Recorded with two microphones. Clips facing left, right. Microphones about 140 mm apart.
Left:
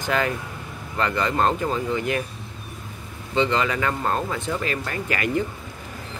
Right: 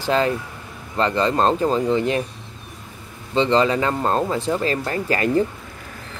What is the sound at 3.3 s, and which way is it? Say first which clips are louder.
Speech: right 5 dB; 30° right (ahead or behind).